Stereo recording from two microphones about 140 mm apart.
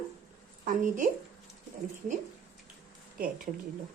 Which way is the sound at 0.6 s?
65° right (ahead or behind).